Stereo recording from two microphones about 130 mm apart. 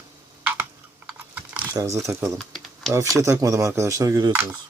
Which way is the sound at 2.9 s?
25° right (ahead or behind).